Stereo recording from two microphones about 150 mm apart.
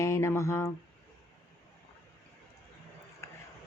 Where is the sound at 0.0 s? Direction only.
20° left (ahead or behind).